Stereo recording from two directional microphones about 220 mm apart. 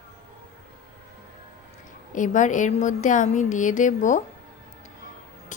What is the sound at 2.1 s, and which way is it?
A woman's voice, 35° left (ahead or behind).